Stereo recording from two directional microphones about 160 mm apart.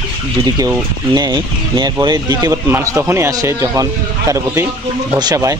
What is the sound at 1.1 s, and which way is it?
A man's voice, 25° right (ahead or behind).